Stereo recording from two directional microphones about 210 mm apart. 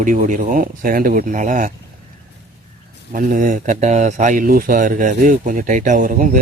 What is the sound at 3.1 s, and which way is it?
Speech, 40° right (ahead or behind).